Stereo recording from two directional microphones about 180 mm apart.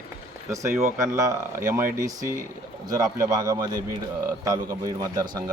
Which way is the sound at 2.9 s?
20° right (ahead or behind).